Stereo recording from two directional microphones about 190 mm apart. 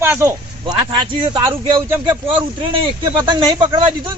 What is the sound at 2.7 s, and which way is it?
Speech, 25° right (ahead or behind).